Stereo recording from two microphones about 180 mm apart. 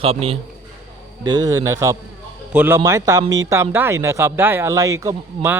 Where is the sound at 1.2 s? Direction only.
20° right (ahead or behind).